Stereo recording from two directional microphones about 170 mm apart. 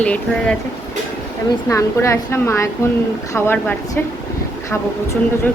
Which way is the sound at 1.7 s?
15° left (ahead or behind).